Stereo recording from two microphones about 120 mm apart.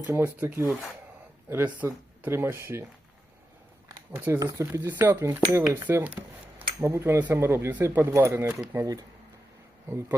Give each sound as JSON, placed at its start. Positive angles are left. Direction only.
{"t": 0.1, "sound": "speech", "side_deg": -20}
{"t": 4.1, "sound": "speech", "side_deg": -15}
{"t": 4.4, "sound": "speech", "side_deg": -30}